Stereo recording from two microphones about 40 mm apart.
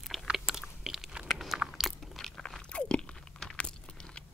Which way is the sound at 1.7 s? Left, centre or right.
Centre.